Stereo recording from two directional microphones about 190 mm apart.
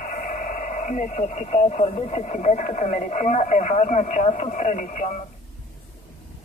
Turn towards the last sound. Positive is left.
turn(degrees=40)  # may be behind; listen again after turning